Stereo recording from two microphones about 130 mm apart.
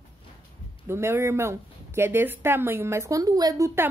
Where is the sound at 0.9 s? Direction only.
20° right (ahead or behind).